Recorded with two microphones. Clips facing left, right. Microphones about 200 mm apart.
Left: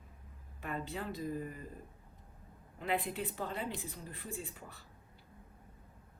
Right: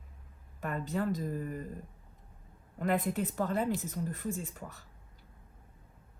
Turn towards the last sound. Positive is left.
turn(degrees=-45)  # may be behind; listen again after turning